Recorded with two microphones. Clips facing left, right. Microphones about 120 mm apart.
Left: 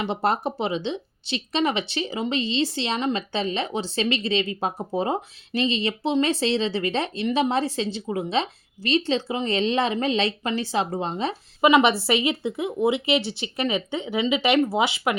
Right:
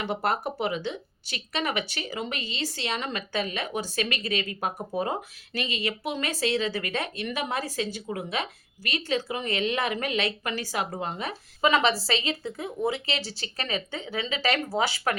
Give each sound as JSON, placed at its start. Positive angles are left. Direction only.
{"t": 0.0, "sound": "speech", "side_deg": 25}